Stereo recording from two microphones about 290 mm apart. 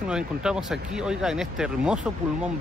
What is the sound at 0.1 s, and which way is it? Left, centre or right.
Speech, centre.